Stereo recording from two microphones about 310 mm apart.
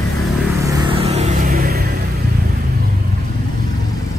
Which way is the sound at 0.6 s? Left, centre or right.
Centre.